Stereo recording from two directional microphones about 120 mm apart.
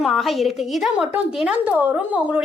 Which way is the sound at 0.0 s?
Centre (ahead or behind).